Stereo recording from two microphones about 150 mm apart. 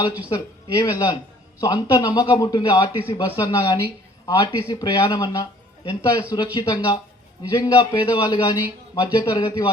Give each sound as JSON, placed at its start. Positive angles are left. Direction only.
{"t": 0.3, "sound": "speech", "side_deg": 20}